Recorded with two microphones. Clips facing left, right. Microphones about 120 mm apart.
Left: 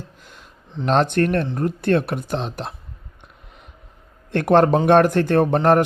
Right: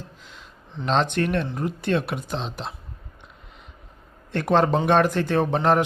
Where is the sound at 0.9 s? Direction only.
50° left (ahead or behind).